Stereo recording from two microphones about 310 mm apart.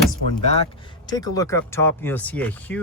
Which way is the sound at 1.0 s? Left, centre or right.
Centre.